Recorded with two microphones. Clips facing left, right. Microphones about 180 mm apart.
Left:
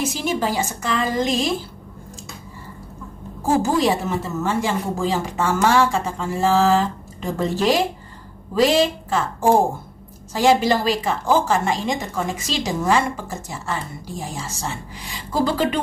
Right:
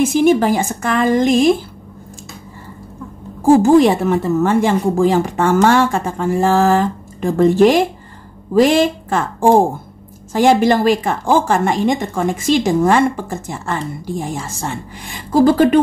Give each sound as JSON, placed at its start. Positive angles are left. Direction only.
{"t": 0.0, "sound": "a woman's voice", "side_deg": -55}
{"t": 3.6, "sound": "a woman's voice", "side_deg": -55}